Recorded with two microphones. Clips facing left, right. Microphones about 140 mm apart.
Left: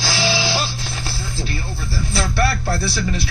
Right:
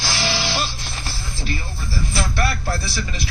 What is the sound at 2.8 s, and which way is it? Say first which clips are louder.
Speech: left 5 dB; 65° left (ahead or behind).